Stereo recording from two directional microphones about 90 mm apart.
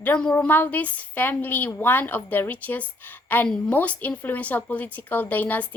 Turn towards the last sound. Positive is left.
turn(degrees=20)  # may be behind; listen again after turning